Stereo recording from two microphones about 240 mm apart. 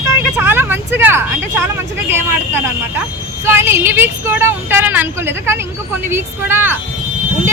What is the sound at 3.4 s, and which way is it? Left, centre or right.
Speech, centre.